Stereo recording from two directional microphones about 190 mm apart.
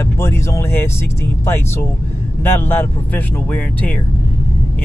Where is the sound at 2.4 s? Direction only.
10° left (ahead or behind).